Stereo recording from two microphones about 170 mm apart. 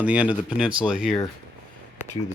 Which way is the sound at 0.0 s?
10° right (ahead or behind).